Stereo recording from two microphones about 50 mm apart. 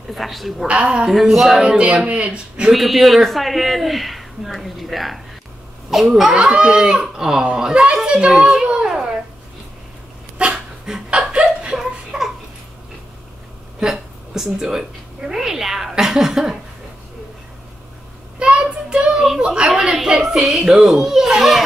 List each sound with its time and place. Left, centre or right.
0.1 s speech: centre
1.6 s speech: right
2.7 s speech: centre
6.3 s speech: centre
8.8 s a sound: centre
10.3 s dog: right
10.9 s chuckle: centre
11.8 s a sound: centre
14.3 s cat: centre
18.4 s child singing: right
19.2 s a woman's voice: centre